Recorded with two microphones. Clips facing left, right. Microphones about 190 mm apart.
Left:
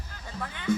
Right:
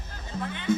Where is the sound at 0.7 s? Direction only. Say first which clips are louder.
Right 1 dB; 25° right (ahead or behind).